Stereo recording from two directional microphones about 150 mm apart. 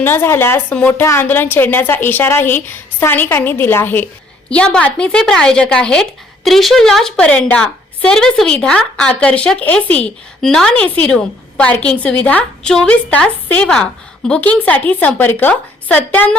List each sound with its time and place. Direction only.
0.0 s speech: 15° left (ahead or behind)